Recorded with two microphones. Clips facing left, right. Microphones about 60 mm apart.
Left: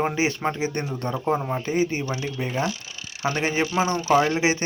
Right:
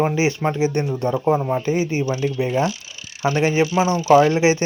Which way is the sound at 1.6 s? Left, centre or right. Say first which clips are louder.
Right 3 dB; right.